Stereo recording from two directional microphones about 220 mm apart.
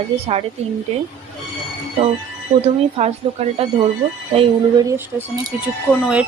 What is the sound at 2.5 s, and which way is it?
Speech, 30° right (ahead or behind).